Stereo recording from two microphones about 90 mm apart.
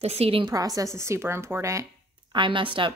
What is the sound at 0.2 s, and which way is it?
Speech, 90° right.